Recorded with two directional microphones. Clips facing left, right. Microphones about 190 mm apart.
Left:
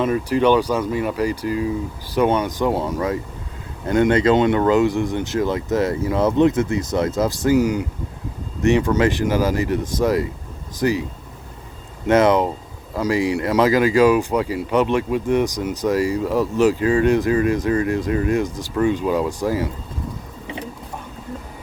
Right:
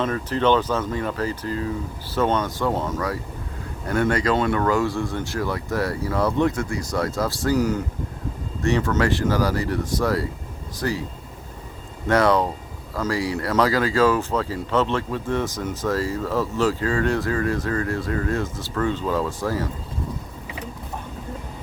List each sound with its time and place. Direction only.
0.0 s speech: 10° left (ahead or behind)
12.0 s speech: 20° left (ahead or behind)